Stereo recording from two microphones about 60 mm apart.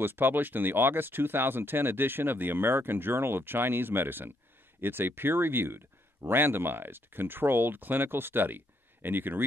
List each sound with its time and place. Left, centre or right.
0.0 s speech: right